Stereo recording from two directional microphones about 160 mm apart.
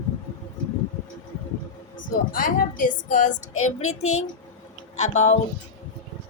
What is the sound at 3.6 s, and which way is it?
Music, 45° left (ahead or behind).